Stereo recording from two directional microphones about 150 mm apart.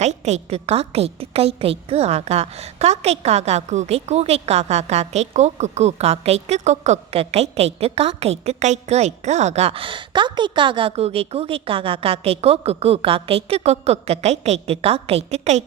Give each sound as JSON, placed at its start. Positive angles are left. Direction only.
{"t": 0.0, "sound": "a woman's voice", "side_deg": -50}